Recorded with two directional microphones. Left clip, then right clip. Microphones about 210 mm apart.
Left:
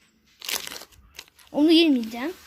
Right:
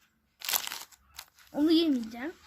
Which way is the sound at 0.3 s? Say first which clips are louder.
Left 3 dB; 15° right (ahead or behind).